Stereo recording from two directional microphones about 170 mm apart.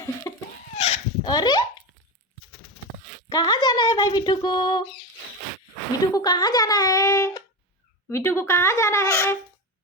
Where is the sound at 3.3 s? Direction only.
25° left (ahead or behind).